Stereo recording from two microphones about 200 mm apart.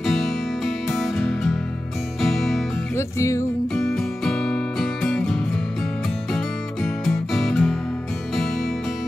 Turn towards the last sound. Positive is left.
turn(degrees=0)  # may be behind; listen again after turning